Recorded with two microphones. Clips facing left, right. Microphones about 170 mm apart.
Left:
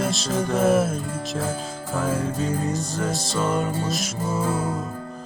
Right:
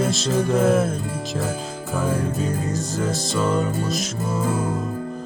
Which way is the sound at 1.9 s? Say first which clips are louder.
Right 1 dB; centre (ahead or behind).